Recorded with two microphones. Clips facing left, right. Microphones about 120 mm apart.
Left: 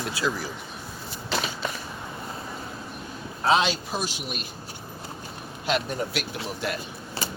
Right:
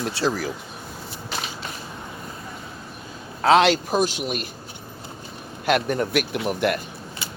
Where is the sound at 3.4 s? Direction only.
75° right (ahead or behind).